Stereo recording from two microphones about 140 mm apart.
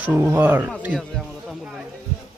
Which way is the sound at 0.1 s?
15° right (ahead or behind).